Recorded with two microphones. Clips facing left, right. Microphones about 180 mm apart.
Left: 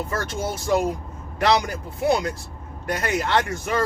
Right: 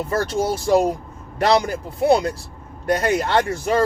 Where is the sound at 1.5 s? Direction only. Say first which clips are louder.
Right 3 dB; 30° right (ahead or behind).